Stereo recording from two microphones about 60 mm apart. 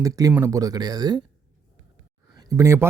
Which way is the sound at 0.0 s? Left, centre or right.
Right.